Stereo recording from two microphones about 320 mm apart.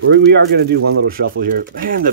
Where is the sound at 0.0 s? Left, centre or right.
Right.